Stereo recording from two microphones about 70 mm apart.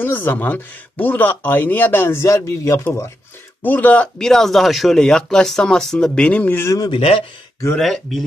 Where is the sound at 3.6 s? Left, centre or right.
Left.